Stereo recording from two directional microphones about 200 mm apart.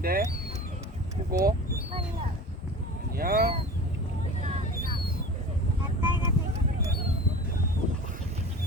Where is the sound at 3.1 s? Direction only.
50° right (ahead or behind).